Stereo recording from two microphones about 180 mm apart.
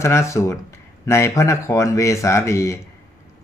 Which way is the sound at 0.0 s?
15° left (ahead or behind).